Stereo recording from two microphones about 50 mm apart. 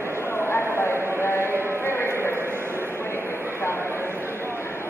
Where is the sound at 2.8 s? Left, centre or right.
Left.